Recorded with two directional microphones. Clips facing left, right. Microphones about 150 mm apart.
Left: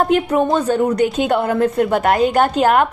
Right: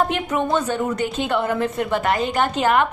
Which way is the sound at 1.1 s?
50° left (ahead or behind).